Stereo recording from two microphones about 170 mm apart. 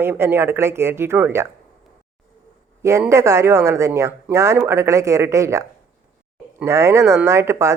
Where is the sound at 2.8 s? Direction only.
15° right (ahead or behind).